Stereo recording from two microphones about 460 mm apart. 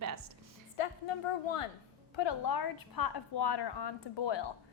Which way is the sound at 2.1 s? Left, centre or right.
Left.